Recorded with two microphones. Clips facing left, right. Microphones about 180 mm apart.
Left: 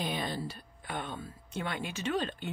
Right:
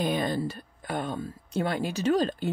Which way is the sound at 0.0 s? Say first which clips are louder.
Right 8 dB; 50° right (ahead or behind).